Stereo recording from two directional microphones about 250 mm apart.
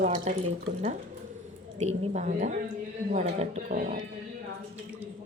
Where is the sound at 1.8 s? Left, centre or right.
Right.